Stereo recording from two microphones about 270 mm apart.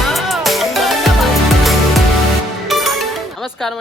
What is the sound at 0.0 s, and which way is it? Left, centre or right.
Music, centre.